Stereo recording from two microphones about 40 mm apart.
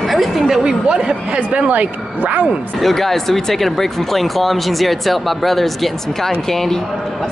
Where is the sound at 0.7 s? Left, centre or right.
Centre.